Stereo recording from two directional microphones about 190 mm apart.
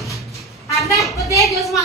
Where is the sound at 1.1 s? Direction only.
15° left (ahead or behind).